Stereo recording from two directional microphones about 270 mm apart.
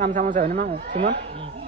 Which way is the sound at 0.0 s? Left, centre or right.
Right.